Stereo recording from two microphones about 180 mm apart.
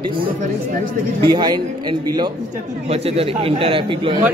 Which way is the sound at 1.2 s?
25° right (ahead or behind).